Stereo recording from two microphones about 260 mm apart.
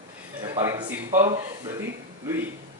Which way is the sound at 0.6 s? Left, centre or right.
Centre.